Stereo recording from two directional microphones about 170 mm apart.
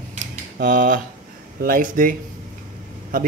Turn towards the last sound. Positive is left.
turn(degrees=-55)  # may be behind; listen again after turning